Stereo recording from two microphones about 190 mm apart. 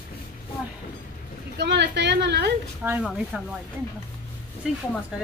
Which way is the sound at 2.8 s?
10° right (ahead or behind).